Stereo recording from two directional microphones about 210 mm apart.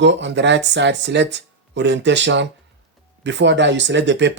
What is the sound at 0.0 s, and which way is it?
Speech, 55° right (ahead or behind).